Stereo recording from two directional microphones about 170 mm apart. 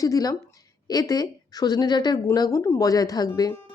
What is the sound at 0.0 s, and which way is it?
Speech, 20° left (ahead or behind).